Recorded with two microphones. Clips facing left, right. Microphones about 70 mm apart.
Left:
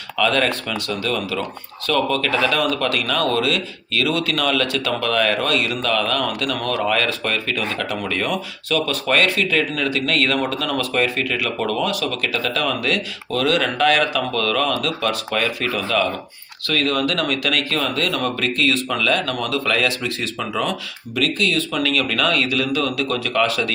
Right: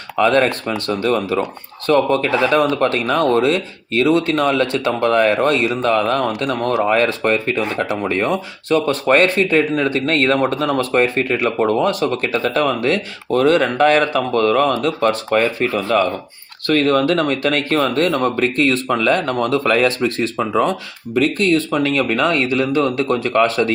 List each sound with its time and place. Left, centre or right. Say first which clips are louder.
0.2 s speech: right 5 dB; right